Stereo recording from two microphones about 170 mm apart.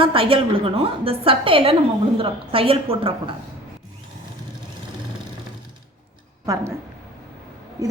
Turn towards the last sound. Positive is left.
turn(degrees=-20)  # may be behind; listen again after turning